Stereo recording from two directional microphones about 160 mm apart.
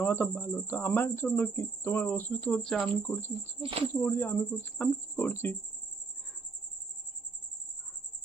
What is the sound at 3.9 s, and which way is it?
Speech, 15° left (ahead or behind).